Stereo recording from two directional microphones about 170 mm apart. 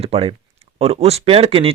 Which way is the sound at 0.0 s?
35° right (ahead or behind).